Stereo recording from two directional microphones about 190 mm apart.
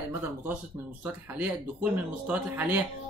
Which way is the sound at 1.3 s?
5° right (ahead or behind).